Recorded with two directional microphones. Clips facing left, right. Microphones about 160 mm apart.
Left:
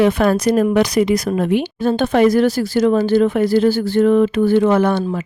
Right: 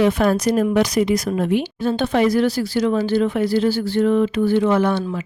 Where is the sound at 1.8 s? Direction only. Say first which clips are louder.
Left 5 dB; 50° left (ahead or behind).